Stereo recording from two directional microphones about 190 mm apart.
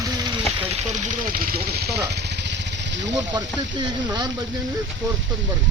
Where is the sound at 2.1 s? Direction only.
60° right (ahead or behind).